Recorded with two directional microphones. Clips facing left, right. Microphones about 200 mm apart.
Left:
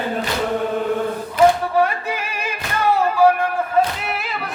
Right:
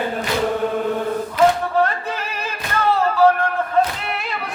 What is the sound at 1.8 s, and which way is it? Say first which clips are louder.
Music: left 1 dB; 10° left (ahead or behind).